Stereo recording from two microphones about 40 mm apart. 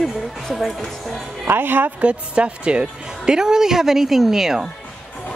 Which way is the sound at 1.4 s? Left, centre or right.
Right.